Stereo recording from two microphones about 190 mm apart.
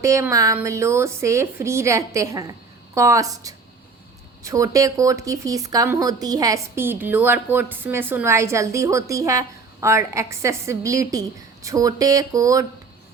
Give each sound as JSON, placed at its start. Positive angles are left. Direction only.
{"t": 0.0, "sound": "speech", "side_deg": -15}